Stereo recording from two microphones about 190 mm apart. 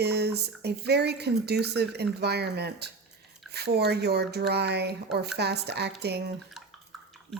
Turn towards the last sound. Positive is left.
turn(degrees=0)  # may be behind; listen again after turning